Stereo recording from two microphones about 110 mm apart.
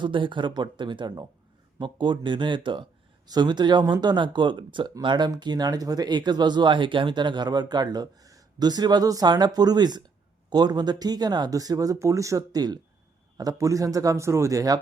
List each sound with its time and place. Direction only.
0.0 s speech: 50° right (ahead or behind); by 14.8 s 30° right (ahead or behind)